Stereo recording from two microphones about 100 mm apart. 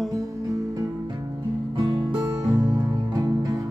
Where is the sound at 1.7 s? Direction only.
50° right (ahead or behind).